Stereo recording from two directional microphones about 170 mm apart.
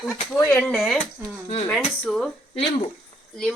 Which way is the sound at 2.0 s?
5° left (ahead or behind).